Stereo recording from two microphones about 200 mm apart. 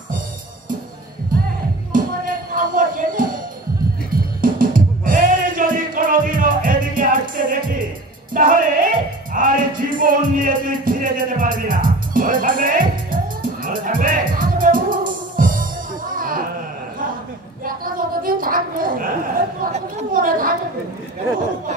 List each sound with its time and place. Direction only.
1.9 s music: 45° right (ahead or behind)
17.6 s bow-wow: 45° right (ahead or behind)
19.6 s chatter: 40° right (ahead or behind)